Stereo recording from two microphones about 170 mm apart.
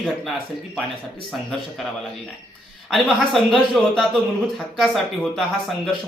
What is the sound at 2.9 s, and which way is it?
Speech, centre (ahead or behind).